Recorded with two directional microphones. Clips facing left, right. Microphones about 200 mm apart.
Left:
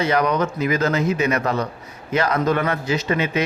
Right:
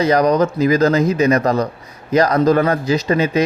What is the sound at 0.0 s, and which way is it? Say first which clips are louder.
Speech: right 6 dB; 35° right (ahead or behind).